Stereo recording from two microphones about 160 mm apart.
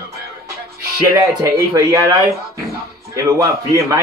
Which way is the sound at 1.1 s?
20° right (ahead or behind).